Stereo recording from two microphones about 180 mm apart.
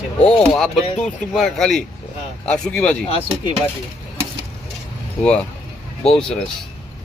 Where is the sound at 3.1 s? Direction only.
30° left (ahead or behind).